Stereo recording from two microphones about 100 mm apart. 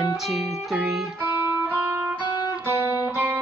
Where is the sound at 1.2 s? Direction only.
20° right (ahead or behind).